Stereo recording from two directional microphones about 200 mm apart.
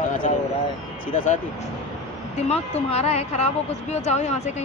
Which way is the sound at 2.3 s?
30° left (ahead or behind).